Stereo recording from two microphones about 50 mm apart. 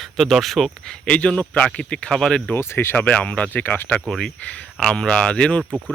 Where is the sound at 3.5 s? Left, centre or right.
Left.